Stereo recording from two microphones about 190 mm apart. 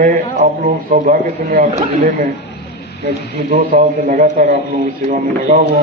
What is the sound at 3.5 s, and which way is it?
A man's voice, 40° right (ahead or behind).